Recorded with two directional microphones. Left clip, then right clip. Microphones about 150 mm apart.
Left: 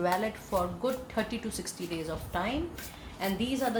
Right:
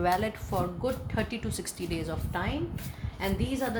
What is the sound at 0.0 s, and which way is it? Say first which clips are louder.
A woman's voice: right 2 dB; 45° right (ahead or behind).